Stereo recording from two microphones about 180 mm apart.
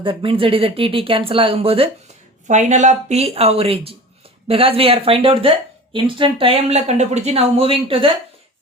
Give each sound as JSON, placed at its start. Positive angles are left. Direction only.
{"t": 0.0, "sound": "speech", "side_deg": -30}